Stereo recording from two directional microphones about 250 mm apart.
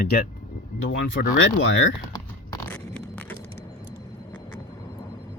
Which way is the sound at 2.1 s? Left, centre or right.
Centre.